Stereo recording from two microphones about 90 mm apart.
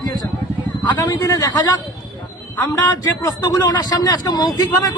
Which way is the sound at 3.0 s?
45° left (ahead or behind).